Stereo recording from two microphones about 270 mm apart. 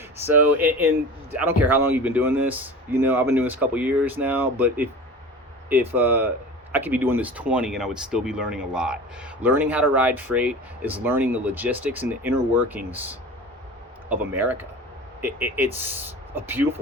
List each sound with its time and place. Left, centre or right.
0.3 s speech: centre